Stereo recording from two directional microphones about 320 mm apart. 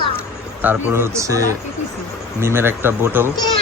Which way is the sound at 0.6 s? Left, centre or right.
Centre.